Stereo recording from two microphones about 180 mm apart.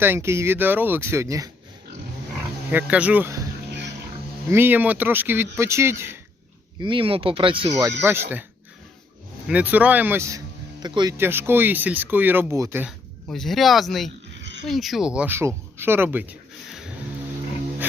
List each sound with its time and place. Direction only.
0.0 s speech: 15° right (ahead or behind)
2.6 s speech: 10° right (ahead or behind)
4.4 s speech: 10° right (ahead or behind)
6.7 s speech: 25° right (ahead or behind)
8.0 s speech: 10° right (ahead or behind)
9.5 s speech: 10° right (ahead or behind)
11.2 s speech: 10° right (ahead or behind)
13.2 s speech: centre (ahead or behind)
16.6 s a sound: centre (ahead or behind)